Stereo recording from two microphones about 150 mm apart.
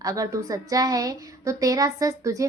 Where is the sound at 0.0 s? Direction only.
20° right (ahead or behind).